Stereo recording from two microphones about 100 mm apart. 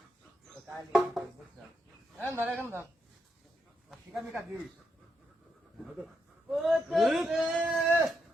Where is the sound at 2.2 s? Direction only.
25° right (ahead or behind).